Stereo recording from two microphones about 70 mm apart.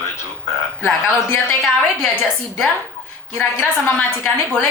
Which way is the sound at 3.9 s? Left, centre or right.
Centre.